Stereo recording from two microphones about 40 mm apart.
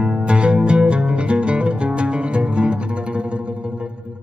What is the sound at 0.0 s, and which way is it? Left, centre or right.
Music, right.